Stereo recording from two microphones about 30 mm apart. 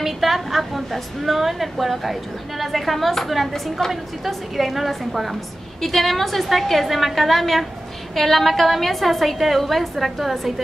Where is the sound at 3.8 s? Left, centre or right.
Centre.